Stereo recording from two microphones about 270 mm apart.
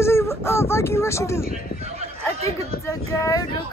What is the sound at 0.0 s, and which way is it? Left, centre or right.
Speech, centre.